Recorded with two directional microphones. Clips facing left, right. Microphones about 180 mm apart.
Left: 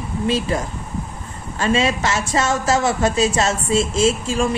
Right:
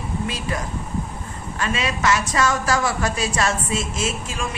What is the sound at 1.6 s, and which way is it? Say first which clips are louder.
A woman's voice: left 5 dB; 30° left (ahead or behind).